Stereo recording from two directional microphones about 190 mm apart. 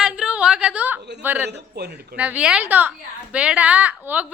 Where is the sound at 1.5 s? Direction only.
60° right (ahead or behind).